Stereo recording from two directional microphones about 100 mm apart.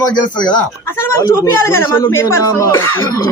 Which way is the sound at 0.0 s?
45° left (ahead or behind).